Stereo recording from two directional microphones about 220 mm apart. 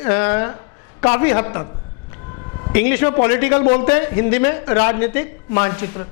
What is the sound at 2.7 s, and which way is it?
A woman's voice, 15° left (ahead or behind).